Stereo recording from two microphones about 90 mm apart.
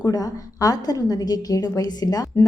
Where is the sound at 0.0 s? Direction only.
45° left (ahead or behind).